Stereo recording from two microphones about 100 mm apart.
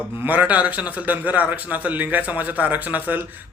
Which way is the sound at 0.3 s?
15° right (ahead or behind).